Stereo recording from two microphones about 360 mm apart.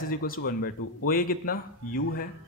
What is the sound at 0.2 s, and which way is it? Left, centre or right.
A man's voice, left.